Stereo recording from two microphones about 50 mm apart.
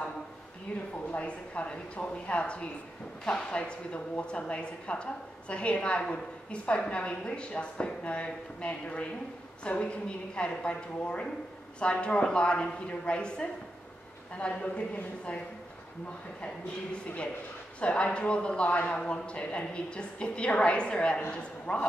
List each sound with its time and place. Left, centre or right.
1.1 s a woman's voice: left